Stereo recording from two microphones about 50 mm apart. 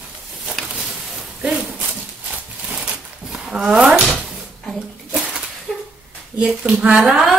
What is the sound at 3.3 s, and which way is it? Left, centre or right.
Speech, centre.